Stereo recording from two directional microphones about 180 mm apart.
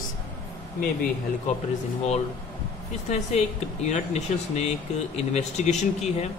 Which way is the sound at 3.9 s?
40° left (ahead or behind).